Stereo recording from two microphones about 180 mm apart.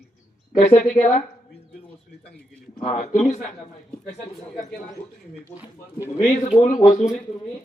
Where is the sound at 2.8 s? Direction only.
40° left (ahead or behind).